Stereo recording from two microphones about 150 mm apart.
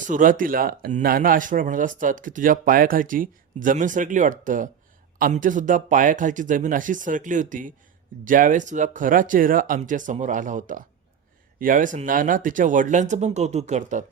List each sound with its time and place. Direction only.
0.1 s speech: 65° right (ahead or behind)